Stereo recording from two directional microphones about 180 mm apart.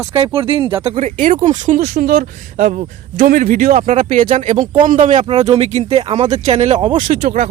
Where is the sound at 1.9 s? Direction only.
55° right (ahead or behind); by 6.7 s 40° right (ahead or behind).